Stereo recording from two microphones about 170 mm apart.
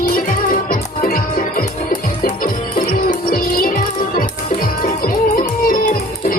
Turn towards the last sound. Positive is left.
turn(degrees=55)  # may be behind; listen again after turning